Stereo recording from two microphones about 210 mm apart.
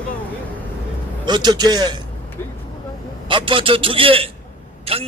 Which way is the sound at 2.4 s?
10° left (ahead or behind).